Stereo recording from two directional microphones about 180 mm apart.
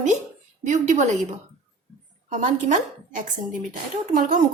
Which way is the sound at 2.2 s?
40° right (ahead or behind).